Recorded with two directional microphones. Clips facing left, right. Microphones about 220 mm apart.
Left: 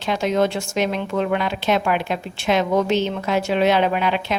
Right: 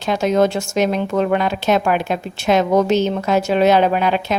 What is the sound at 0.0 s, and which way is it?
A woman's voice, 40° right (ahead or behind).